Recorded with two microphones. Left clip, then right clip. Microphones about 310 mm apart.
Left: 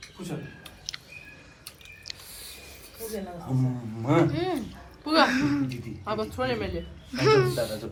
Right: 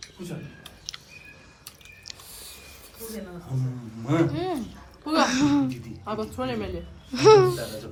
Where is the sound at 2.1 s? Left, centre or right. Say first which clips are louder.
Left 2 dB; centre.